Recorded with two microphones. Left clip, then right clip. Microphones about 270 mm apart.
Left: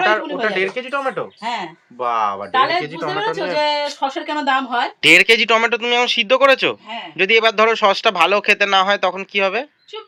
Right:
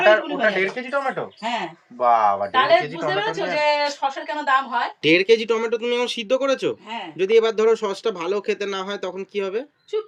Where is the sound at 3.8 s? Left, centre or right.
Left.